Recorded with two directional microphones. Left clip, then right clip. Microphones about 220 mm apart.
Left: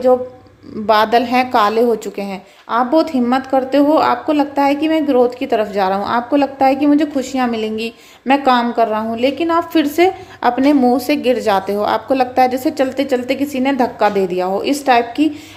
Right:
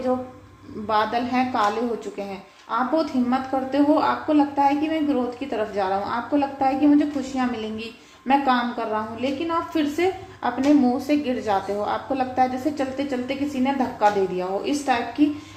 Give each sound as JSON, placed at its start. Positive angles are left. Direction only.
{"t": 0.9, "sound": "a woman's voice", "side_deg": 45}
{"t": 2.6, "sound": "a woman's voice", "side_deg": 45}